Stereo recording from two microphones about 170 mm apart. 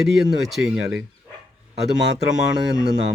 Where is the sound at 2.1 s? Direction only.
5° right (ahead or behind).